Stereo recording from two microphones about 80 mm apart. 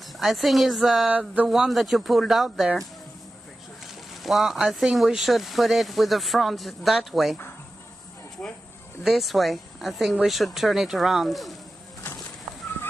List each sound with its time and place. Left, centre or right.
0.0 s speech: centre
1.0 s a sound: centre
1.5 s speech: centre
3.8 s speech: centre
8.4 s speech: centre
9.0 s speech: centre
12.5 s fowl: centre